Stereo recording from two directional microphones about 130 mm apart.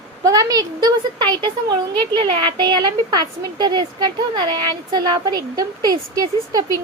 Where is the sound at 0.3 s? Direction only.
30° right (ahead or behind).